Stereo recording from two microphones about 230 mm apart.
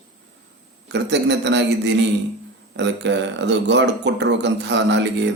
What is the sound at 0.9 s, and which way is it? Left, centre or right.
A man's voice, right.